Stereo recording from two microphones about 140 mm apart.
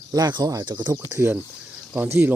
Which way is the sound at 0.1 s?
30° right (ahead or behind).